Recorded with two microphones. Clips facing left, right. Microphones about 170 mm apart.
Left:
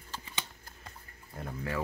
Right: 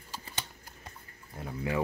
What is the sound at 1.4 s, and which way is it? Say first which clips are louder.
Speech: right 3 dB; 10° right (ahead or behind).